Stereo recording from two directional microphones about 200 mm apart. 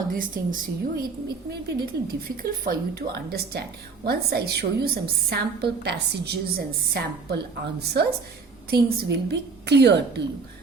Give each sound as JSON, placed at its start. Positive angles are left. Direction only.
{"t": 0.1, "sound": "a woman's voice", "side_deg": -45}